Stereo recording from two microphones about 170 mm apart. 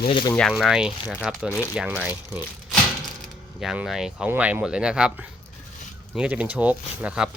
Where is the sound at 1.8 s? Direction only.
5° right (ahead or behind).